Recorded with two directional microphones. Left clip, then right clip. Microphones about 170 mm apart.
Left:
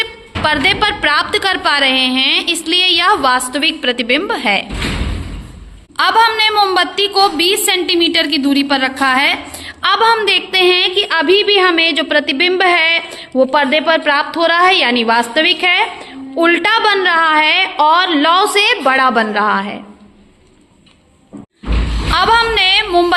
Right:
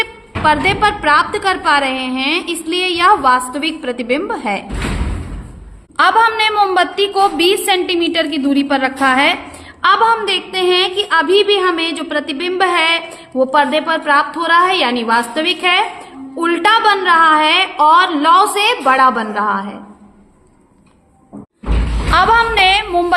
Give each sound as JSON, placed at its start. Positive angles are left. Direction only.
{"t": 0.0, "sound": "a woman's voice", "side_deg": 0}
{"t": 6.0, "sound": "a woman's voice", "side_deg": -5}
{"t": 22.1, "sound": "a woman's voice", "side_deg": -10}